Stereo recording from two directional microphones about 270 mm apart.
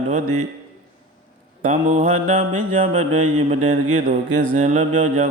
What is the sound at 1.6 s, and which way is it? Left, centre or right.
Mantra, right.